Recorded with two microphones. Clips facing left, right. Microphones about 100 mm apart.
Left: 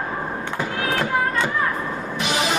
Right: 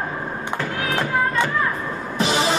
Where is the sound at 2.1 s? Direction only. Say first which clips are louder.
Right 4 dB; 30° right (ahead or behind).